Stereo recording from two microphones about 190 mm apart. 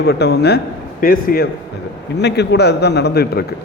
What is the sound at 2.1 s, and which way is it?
A man's voice, 60° left (ahead or behind).